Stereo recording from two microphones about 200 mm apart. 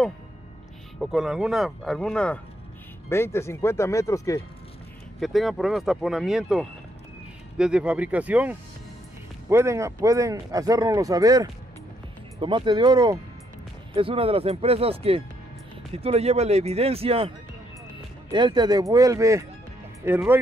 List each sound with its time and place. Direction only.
0.9 s speech: centre (ahead or behind); by 4.4 s 15° left (ahead or behind)
5.2 s speech: centre (ahead or behind); by 17.3 s 30° right (ahead or behind)
18.3 s speech: 20° right (ahead or behind)